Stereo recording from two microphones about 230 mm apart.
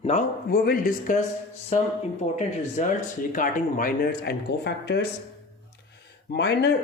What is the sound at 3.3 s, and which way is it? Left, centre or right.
Speech, left.